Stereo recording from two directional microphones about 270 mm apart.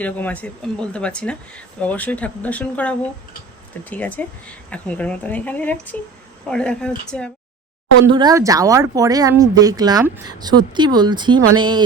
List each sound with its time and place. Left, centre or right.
0.0 s speech: centre
8.1 s speech: centre